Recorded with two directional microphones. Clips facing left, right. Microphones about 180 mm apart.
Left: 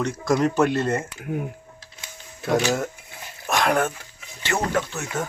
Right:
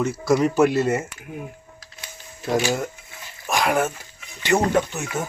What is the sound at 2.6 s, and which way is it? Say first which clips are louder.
Speech: even; 5° right (ahead or behind).